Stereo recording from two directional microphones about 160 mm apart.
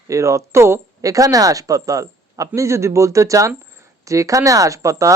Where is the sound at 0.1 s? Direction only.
20° right (ahead or behind).